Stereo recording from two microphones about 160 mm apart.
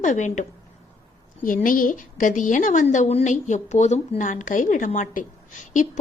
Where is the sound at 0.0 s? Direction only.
50° left (ahead or behind).